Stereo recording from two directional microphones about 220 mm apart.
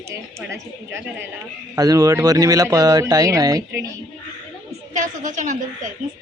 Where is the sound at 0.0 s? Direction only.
10° right (ahead or behind).